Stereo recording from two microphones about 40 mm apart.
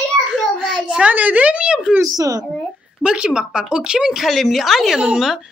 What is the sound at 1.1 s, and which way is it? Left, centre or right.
Speech, right.